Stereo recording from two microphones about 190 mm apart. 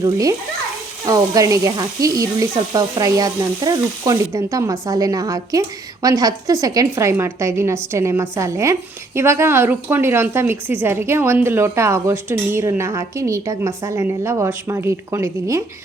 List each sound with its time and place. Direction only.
0.0 s speech: 15° right (ahead or behind)